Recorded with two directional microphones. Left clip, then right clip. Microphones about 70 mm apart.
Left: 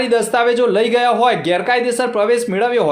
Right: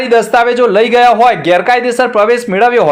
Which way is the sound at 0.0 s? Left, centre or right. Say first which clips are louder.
Right 6 dB; right.